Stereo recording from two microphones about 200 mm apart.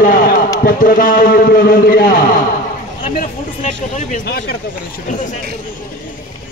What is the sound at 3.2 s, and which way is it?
Speech, 40° left (ahead or behind).